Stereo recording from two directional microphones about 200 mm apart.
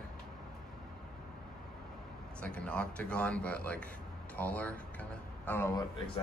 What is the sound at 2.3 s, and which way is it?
Speech, 5° left (ahead or behind).